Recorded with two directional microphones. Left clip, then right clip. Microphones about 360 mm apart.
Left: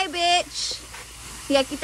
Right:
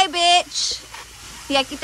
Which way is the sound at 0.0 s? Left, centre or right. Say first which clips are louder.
Right 5 dB; centre.